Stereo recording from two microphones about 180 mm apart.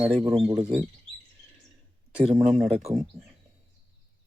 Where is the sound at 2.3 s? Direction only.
40° right (ahead or behind).